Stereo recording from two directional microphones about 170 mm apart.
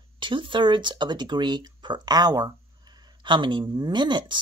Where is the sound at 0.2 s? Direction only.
30° right (ahead or behind).